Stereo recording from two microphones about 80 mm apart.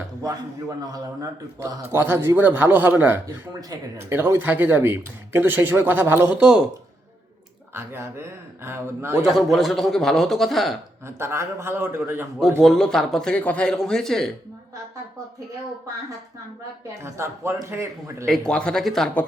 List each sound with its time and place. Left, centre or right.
0.8 s a man's voice: right
1.8 s speech: right
7.8 s speech: right
9.2 s speech: centre
11.0 s speech: right
12.6 s speech: centre
13.3 s a man's voice: centre
17.0 s speech: right
18.3 s a man's voice: centre